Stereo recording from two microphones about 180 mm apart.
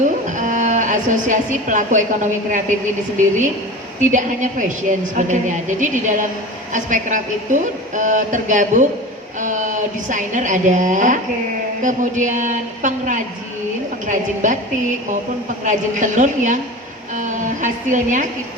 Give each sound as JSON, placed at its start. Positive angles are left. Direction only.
{"t": 0.3, "sound": "speech", "side_deg": -45}
{"t": 4.0, "sound": "a woman's voice", "side_deg": -45}
{"t": 15.6, "sound": "a woman's voice", "side_deg": -45}